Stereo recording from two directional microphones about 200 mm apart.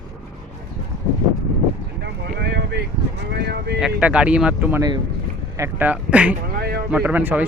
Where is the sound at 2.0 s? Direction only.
55° right (ahead or behind).